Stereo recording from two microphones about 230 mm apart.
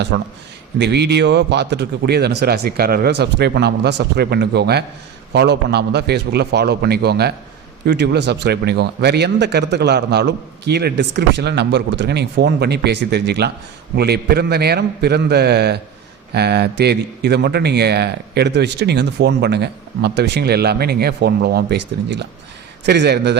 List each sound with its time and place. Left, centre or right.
0.1 s a man's voice: right